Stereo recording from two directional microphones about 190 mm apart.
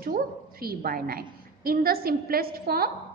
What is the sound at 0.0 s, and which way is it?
A woman's voice, 50° right (ahead or behind).